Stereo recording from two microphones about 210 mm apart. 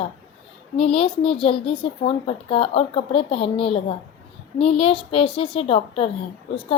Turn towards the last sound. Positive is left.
turn(degrees=25)  # may be behind; listen again after turning